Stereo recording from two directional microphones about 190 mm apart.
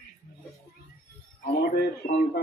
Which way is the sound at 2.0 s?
50° left (ahead or behind).